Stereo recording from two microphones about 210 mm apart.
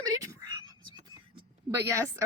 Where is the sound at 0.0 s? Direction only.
15° right (ahead or behind).